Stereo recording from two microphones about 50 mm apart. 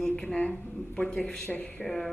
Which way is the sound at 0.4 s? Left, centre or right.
Left.